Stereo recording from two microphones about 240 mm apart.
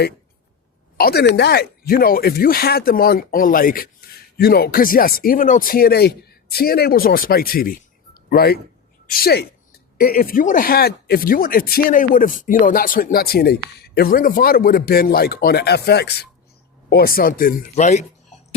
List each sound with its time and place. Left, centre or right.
0.9 s speech: left